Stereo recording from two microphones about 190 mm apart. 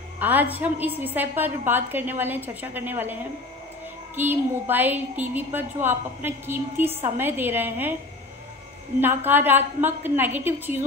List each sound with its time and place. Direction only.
0.2 s a woman's voice: 10° right (ahead or behind)
9.0 s a woman's voice: 10° right (ahead or behind)